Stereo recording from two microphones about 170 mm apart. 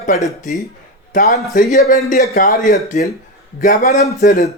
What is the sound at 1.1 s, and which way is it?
A man's voice, 50° left (ahead or behind).